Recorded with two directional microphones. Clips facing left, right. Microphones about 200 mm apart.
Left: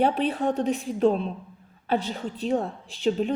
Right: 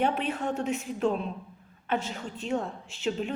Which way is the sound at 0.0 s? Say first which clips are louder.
Left 5 dB; 35° left (ahead or behind).